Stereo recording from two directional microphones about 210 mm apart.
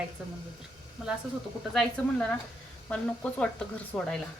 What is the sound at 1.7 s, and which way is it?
A woman's voice, 5° left (ahead or behind).